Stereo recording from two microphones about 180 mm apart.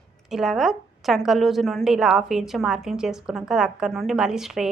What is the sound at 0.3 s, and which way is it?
A woman's voice, centre (ahead or behind).